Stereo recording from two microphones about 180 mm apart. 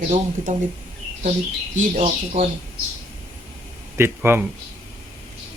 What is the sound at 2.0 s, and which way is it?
Speech, 40° right (ahead or behind).